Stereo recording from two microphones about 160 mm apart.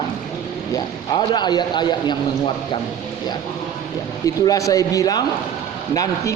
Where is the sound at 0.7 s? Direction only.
25° left (ahead or behind).